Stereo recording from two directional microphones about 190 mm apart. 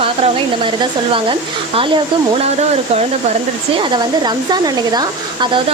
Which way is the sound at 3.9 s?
20° right (ahead or behind).